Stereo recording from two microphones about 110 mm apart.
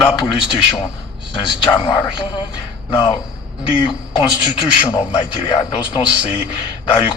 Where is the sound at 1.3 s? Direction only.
45° left (ahead or behind).